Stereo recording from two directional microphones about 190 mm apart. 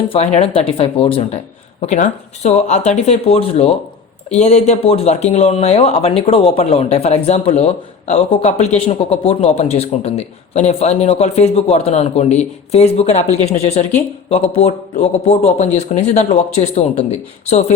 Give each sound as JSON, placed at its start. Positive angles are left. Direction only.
{"t": 0.1, "sound": "speech", "side_deg": 35}